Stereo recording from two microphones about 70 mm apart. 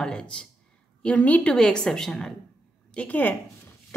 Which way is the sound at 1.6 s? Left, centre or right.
Centre.